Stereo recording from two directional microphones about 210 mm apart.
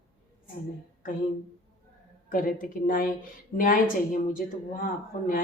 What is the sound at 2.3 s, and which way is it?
A woman's voice, 40° left (ahead or behind).